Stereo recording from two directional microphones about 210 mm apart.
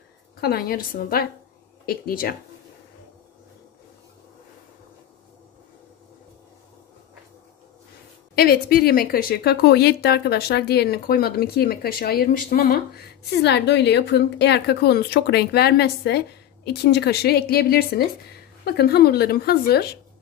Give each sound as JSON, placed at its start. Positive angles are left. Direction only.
{"t": 0.4, "sound": "speech", "side_deg": 45}
{"t": 8.4, "sound": "speech", "side_deg": 45}